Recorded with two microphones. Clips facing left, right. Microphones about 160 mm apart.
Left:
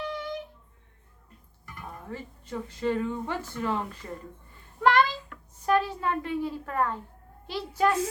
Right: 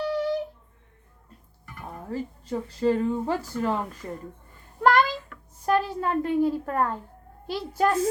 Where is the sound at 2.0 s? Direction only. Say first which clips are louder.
Right 9 dB; 35° right (ahead or behind).